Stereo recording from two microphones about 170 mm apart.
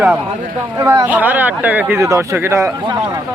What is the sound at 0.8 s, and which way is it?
Speech, 20° right (ahead or behind).